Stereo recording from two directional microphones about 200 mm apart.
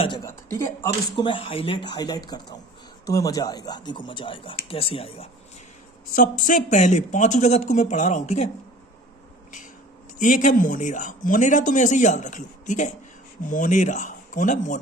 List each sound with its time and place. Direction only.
0.0 s speech: 20° left (ahead or behind)
6.1 s speech: 40° left (ahead or behind)
10.2 s speech: 40° left (ahead or behind)